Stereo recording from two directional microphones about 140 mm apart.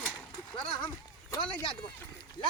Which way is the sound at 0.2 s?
5° left (ahead or behind).